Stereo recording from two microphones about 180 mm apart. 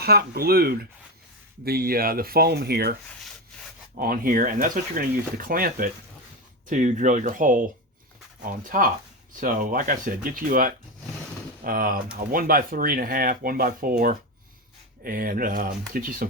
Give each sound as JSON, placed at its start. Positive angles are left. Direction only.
{"t": 0.0, "sound": "speech", "side_deg": -60}
{"t": 3.9, "sound": "speech", "side_deg": -55}